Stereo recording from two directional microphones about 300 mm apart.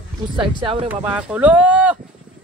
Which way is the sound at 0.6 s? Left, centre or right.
Centre.